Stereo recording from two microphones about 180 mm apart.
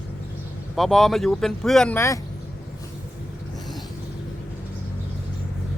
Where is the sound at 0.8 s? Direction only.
Centre (ahead or behind).